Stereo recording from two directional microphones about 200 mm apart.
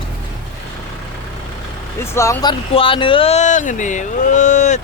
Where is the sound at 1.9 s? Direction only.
15° left (ahead or behind).